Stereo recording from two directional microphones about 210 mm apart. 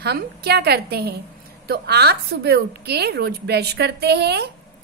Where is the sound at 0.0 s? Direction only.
50° right (ahead or behind).